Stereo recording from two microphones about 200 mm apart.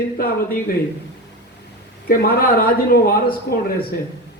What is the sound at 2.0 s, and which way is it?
Speech, 45° left (ahead or behind).